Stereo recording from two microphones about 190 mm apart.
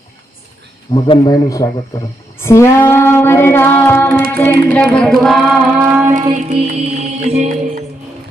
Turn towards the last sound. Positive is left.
turn(degrees=-35)  # may be behind; listen again after turning